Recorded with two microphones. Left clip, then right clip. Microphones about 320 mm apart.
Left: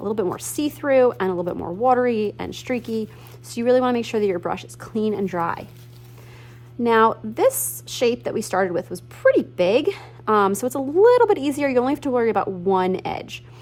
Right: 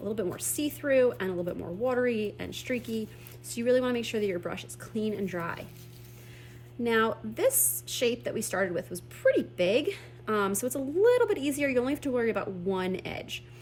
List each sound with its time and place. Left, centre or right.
0.2 s a woman's voice: centre
6.8 s a woman's voice: centre